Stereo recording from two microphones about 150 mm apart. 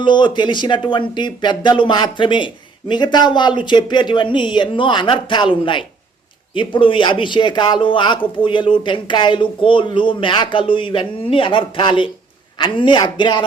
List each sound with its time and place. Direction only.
0.0 s speech: 30° left (ahead or behind)